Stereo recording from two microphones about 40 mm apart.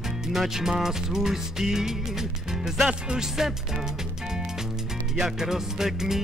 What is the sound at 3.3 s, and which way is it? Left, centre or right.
Music, centre.